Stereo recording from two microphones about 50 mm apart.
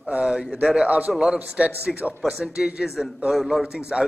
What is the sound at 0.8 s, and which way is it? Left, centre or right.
Speech, right.